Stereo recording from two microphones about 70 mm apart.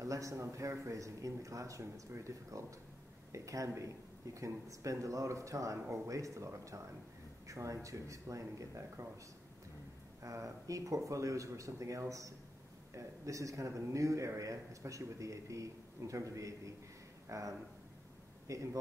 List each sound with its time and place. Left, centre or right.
0.0 s a man's voice: right
10.2 s a man's voice: right